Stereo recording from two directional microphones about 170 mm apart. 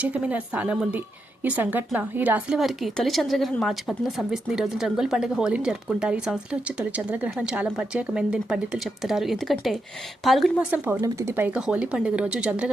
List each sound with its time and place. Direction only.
0.0 s a woman's voice: 10° right (ahead or behind)
10.7 s speech: 10° right (ahead or behind)